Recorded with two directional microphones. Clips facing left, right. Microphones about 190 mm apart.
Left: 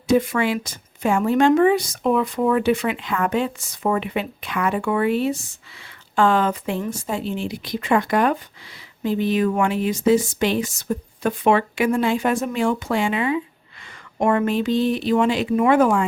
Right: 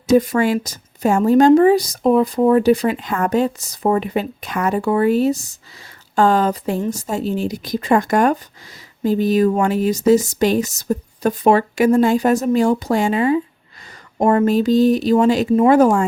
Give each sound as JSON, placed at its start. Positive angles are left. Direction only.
{"t": 0.1, "sound": "speech", "side_deg": -40}